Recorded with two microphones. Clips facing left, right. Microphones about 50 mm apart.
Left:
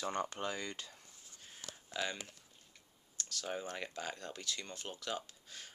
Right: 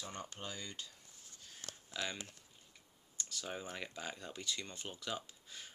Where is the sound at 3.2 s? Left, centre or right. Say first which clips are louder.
Left 2 dB; centre.